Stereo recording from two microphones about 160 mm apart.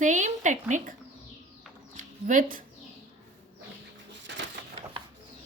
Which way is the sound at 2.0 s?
55° right (ahead or behind).